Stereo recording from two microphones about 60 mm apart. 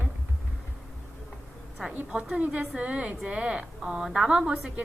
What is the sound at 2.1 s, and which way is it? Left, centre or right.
A woman's voice, centre.